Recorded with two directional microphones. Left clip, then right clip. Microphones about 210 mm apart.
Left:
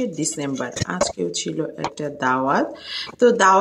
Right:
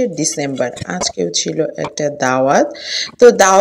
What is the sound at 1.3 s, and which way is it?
Speech, 15° right (ahead or behind).